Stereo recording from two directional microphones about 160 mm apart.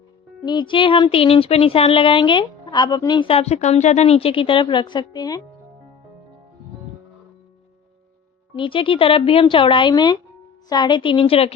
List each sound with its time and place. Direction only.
0.4 s speech: 30° left (ahead or behind)
8.5 s speech: 30° left (ahead or behind)